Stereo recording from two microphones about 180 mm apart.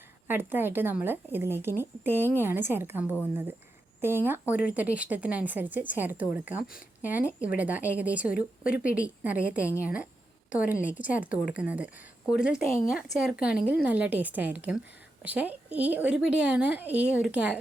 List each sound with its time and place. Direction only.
0.3 s speech: 10° right (ahead or behind)
8.7 s speech: 50° left (ahead or behind)
9.0 s speech: 10° right (ahead or behind)